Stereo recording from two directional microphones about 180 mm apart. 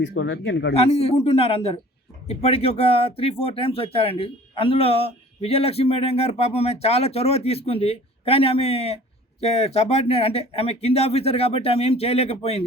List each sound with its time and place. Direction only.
0.0 s speech: 85° left
0.7 s speech: 35° left (ahead or behind)